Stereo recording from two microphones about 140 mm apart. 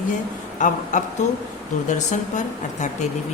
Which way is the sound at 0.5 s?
60° left (ahead or behind).